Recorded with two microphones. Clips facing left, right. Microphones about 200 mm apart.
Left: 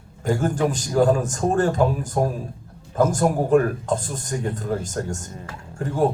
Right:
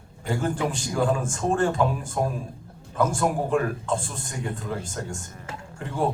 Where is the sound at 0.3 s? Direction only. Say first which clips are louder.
Left 5 dB; 45° left (ahead or behind).